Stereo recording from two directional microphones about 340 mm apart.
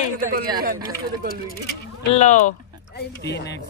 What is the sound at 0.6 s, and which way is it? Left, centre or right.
Speech, right.